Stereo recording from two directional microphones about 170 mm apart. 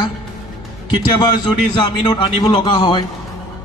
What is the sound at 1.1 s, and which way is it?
A man's voice, 30° left (ahead or behind).